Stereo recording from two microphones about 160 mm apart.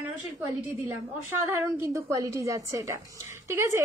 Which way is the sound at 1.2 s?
15° right (ahead or behind).